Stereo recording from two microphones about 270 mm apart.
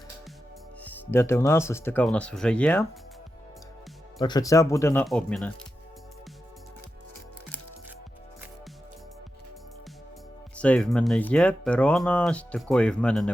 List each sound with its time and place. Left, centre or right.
0.9 s speech: centre
4.2 s speech: centre
10.6 s speech: centre